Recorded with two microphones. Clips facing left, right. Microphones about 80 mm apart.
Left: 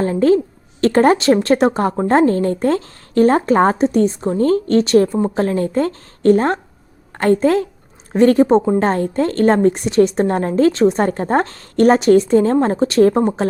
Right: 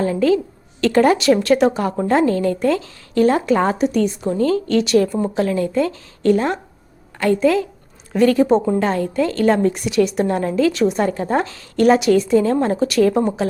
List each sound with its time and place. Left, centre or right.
0.0 s speech: left